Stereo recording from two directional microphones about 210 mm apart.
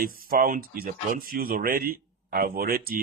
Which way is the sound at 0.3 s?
40° right (ahead or behind).